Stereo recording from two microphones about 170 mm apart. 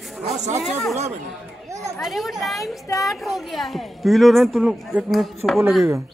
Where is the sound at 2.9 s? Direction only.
20° left (ahead or behind).